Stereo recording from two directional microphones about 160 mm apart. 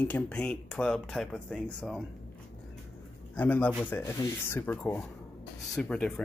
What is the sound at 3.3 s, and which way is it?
Speech, 10° left (ahead or behind).